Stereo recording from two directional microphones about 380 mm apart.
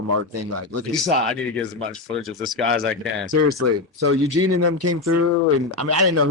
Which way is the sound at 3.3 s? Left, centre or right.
Right.